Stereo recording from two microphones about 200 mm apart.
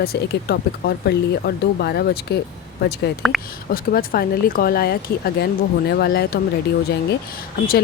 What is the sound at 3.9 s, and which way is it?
Speech, 50° left (ahead or behind).